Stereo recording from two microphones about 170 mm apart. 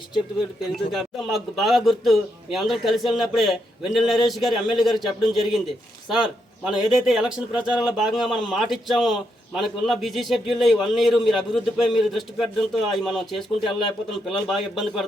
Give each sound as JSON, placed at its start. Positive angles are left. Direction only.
{"t": 0.3, "sound": "a man's voice", "side_deg": 0}